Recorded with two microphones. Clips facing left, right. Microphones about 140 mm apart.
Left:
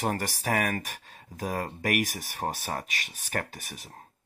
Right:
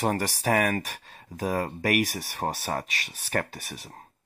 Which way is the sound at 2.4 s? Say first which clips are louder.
Right 2 dB; 50° right (ahead or behind).